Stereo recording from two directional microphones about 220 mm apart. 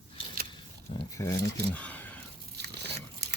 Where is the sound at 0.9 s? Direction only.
25° left (ahead or behind).